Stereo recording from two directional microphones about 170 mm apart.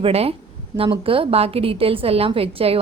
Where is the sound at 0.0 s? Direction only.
35° right (ahead or behind).